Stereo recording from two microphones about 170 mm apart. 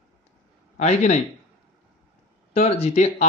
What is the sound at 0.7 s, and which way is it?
Speech, 45° left (ahead or behind).